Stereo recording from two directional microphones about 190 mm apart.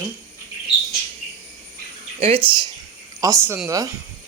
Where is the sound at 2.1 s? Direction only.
30° right (ahead or behind).